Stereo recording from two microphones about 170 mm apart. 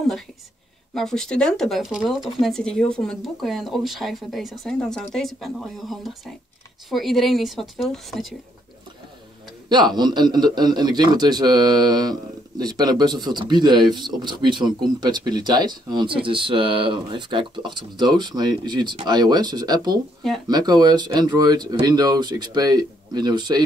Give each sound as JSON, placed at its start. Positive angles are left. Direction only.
{"t": 0.9, "sound": "speech", "side_deg": 5}
{"t": 9.7, "sound": "a man's voice", "side_deg": -25}